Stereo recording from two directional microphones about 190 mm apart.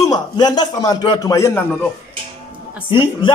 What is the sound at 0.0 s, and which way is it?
A man's voice, 20° left (ahead or behind).